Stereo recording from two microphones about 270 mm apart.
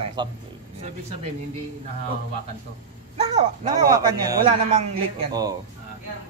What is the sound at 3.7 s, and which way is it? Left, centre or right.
A man's voice, centre.